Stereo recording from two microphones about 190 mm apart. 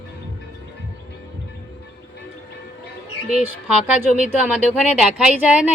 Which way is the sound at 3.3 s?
5° right (ahead or behind).